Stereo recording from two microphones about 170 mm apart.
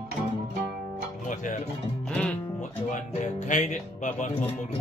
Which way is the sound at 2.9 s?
45° left (ahead or behind).